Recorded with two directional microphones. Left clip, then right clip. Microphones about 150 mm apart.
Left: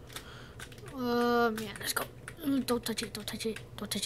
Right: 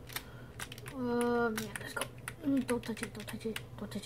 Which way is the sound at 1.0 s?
25° left (ahead or behind).